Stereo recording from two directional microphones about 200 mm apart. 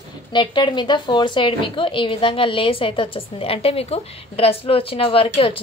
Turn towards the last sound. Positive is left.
turn(degrees=25)  # may be behind; listen again after turning